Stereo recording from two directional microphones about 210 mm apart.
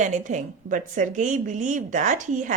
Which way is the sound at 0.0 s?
35° right (ahead or behind).